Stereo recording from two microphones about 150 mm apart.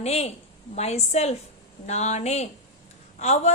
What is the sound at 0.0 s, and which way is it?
A woman's voice, 45° left (ahead or behind).